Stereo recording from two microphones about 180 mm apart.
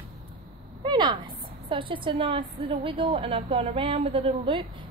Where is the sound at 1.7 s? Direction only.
30° right (ahead or behind).